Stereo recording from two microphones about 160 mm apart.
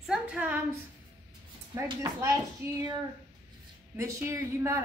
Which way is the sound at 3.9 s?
20° right (ahead or behind).